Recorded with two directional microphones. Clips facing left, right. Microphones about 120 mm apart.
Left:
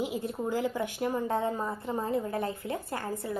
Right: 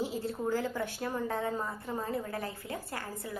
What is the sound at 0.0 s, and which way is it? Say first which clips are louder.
A woman's voice: left 1 dB; 15° left (ahead or behind).